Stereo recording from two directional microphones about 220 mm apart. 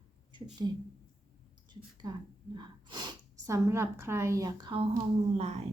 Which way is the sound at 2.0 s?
20° right (ahead or behind).